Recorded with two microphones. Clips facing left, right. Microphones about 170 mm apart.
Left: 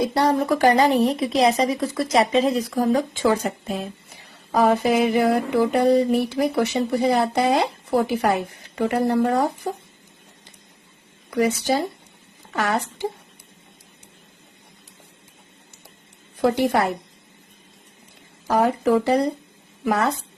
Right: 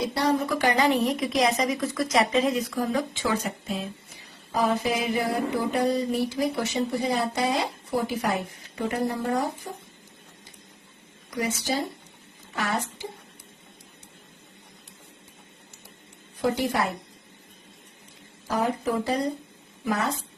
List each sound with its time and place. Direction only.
0.1 s a woman's voice: 50° left (ahead or behind)
4.5 s mantra: 60° left (ahead or behind)
7.9 s speech: 65° left (ahead or behind)
11.3 s mantra: 65° left (ahead or behind)
12.5 s speech: 70° left (ahead or behind)
16.4 s mantra: 65° left (ahead or behind)
18.4 s a woman's voice: 80° left